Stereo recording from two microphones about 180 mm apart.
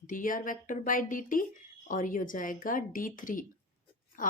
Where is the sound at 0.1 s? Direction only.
50° left (ahead or behind).